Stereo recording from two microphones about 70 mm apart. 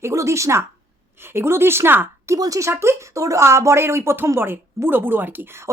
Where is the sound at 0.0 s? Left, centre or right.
Right.